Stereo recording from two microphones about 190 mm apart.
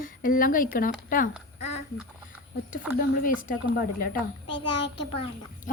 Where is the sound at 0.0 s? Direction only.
45° left (ahead or behind).